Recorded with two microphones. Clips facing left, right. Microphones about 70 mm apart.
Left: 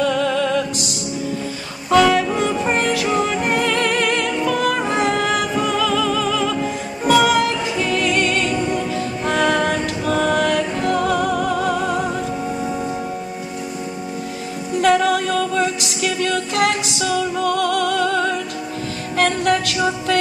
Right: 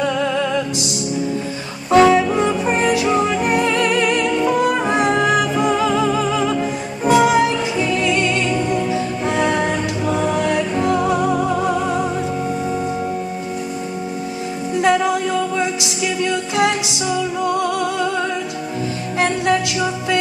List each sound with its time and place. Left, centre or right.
0.0 s music: right
1.9 s music: right
3.6 s music: left
4.2 s music: right
15.6 s music: right